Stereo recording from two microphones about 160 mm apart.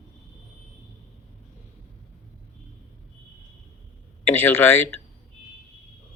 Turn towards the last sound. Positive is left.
turn(degrees=15)  # may be behind; listen again after turning